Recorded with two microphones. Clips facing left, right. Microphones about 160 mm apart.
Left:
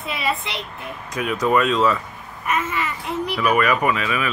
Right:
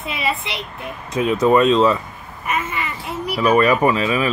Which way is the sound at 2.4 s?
Centre (ahead or behind).